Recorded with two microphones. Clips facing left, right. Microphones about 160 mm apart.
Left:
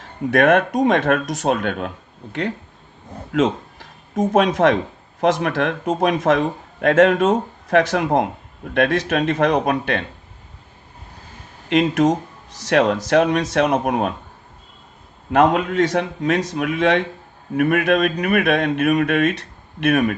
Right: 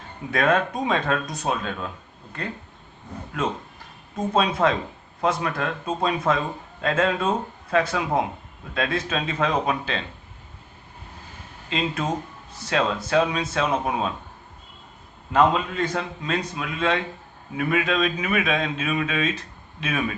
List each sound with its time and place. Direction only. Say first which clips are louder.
0.3 s a man's voice: left 7 dB; 70° left (ahead or behind)
3.3 s a sound: left 9 dB; 90° left
4.4 s a man's voice: left 5 dB; 80° left; by 10.1 s 65° left (ahead or behind)
11.7 s a man's voice: left 10 dB; 75° left (ahead or behind)
15.3 s a man's voice: left 4 dB; 70° left (ahead or behind)